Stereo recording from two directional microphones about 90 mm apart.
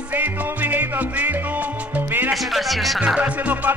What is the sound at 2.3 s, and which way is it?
Music, centre (ahead or behind).